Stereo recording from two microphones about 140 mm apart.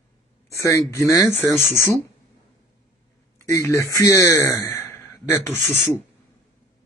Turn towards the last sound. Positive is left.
turn(degrees=15)  # may be behind; listen again after turning